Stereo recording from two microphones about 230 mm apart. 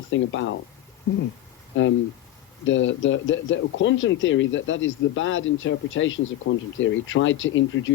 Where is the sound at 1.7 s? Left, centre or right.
Left.